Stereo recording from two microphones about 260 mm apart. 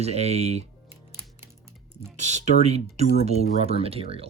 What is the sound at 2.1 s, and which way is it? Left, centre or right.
Speech, right.